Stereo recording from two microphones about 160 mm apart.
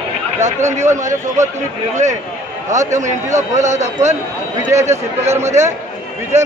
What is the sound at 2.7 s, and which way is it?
Speech, 50° right (ahead or behind).